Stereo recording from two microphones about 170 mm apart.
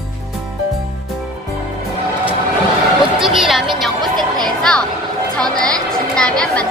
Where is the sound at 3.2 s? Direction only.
Centre (ahead or behind).